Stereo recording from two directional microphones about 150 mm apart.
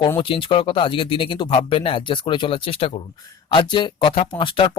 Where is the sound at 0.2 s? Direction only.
35° left (ahead or behind).